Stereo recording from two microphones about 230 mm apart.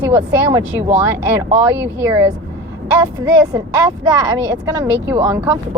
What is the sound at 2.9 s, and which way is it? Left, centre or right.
Speech, centre.